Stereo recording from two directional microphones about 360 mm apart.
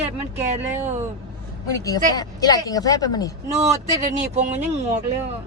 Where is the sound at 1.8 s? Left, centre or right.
Centre.